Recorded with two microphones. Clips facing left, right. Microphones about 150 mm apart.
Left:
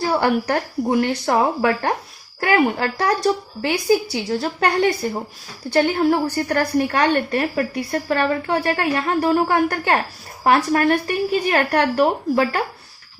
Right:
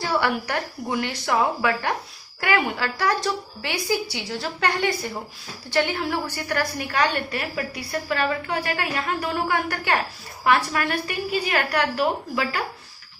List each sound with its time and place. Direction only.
0.1 s a woman's voice: 40° left (ahead or behind)